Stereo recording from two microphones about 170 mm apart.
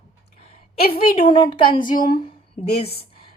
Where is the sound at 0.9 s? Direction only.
30° left (ahead or behind).